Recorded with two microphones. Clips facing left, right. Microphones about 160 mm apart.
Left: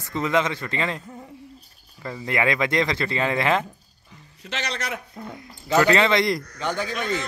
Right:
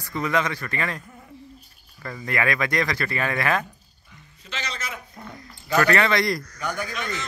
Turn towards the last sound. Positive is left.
turn(degrees=25)  # may be behind; listen again after turning